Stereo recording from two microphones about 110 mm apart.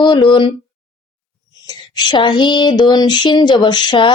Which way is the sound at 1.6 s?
40° left (ahead or behind).